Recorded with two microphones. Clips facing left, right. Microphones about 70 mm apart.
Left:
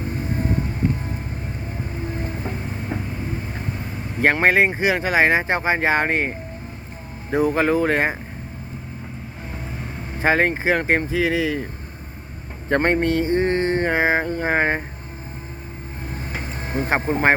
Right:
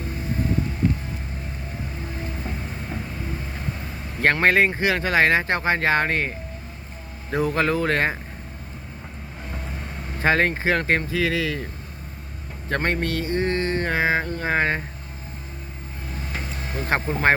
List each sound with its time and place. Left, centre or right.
2.1 s music: left
2.9 s vehicle: left
4.2 s speech: centre
10.2 s speech: centre
12.6 s a sound: left
16.0 s vehicle: left
16.4 s a sound: left